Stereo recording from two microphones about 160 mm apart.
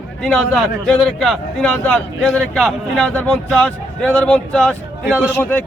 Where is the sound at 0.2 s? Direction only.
5° left (ahead or behind).